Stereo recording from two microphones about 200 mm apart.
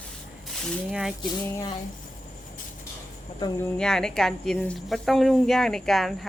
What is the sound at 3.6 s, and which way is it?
Speech, 5° left (ahead or behind).